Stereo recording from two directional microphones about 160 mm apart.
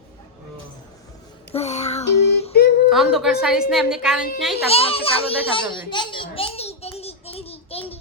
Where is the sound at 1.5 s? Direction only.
45° left (ahead or behind).